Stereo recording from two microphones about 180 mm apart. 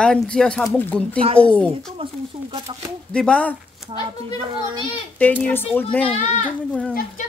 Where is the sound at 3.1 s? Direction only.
5° left (ahead or behind).